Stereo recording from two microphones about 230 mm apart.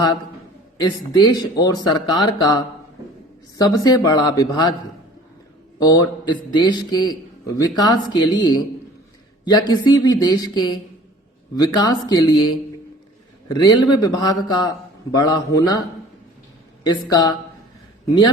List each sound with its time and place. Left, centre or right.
0.9 s a man's voice: centre
5.8 s a man's voice: centre
13.5 s a man's voice: centre
16.8 s a man's voice: centre